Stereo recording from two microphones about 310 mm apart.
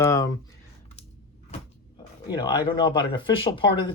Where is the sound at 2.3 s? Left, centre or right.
Centre.